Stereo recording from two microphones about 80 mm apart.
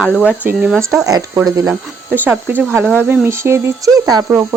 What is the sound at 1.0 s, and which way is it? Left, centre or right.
Speech, right.